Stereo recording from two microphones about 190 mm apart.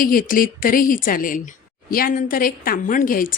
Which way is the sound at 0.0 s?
45° left (ahead or behind).